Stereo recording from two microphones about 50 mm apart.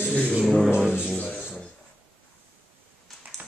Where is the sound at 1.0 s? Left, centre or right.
Left.